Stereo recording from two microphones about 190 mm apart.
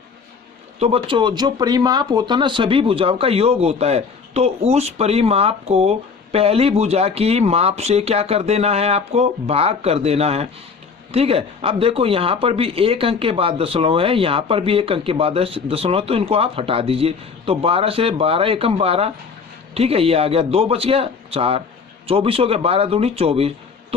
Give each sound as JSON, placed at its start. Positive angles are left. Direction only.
{"t": 0.8, "sound": "speech", "side_deg": -30}